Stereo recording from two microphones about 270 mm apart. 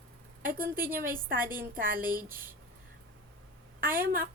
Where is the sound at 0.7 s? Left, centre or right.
Centre.